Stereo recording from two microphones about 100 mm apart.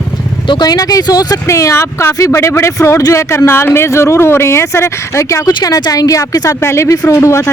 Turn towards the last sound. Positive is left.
turn(degrees=25)  # may be behind; listen again after turning